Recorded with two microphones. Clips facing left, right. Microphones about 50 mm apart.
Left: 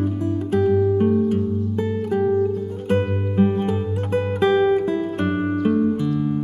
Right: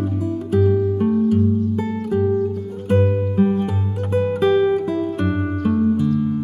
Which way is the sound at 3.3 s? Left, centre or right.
Centre.